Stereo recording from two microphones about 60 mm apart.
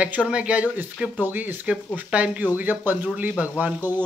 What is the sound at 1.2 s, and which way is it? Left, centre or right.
Speech, right.